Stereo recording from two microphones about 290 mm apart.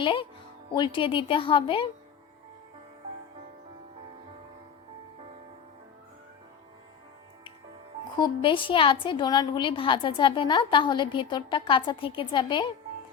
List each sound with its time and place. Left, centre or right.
0.0 s a woman's voice: centre
8.2 s a woman's voice: centre